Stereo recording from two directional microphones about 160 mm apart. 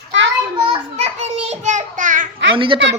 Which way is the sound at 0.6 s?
35° right (ahead or behind).